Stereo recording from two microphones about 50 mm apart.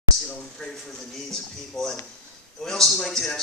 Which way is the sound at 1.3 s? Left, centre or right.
Centre.